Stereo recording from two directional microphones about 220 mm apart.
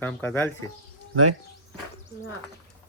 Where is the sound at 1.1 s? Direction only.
80° right.